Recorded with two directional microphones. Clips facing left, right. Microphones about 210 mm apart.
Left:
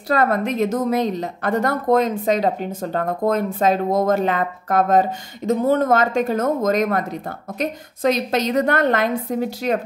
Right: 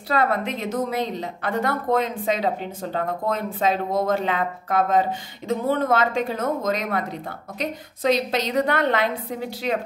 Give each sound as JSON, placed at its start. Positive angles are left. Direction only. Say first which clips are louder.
{"t": 0.1, "sound": "a woman's voice", "louder": "left 4 dB", "side_deg": 45}